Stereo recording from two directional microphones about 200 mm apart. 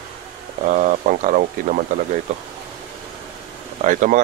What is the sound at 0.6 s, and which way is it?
Speech, 40° right (ahead or behind).